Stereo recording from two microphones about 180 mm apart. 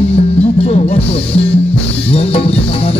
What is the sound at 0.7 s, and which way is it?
Music, 35° left (ahead or behind).